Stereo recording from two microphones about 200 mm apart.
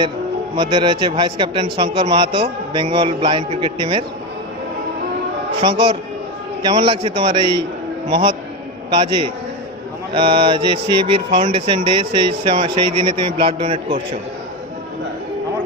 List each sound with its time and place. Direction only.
0.6 s a man's voice: 20° right (ahead or behind)
5.6 s a man's voice: 25° right (ahead or behind)